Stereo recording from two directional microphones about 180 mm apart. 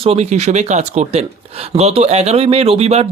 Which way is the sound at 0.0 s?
35° right (ahead or behind).